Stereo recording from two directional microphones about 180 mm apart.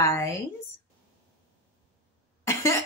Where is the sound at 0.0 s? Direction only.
15° left (ahead or behind).